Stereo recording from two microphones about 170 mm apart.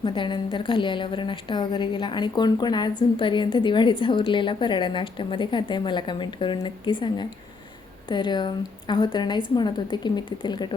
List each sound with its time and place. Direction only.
0.0 s a woman's voice: 30° left (ahead or behind)